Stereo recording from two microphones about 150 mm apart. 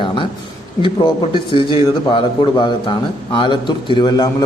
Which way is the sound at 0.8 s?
35° left (ahead or behind).